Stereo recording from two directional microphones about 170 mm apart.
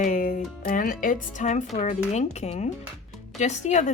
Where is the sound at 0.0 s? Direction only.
50° left (ahead or behind).